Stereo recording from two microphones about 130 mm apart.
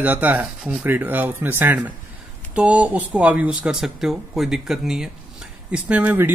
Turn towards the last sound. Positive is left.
turn(degrees=-10)  # may be behind; listen again after turning